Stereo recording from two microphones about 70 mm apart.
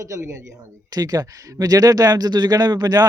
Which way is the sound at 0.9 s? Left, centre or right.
Right.